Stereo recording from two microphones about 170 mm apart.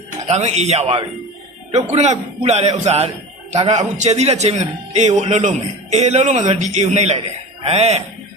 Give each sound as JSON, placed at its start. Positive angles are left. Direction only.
{"t": 0.3, "sound": "speech", "side_deg": -40}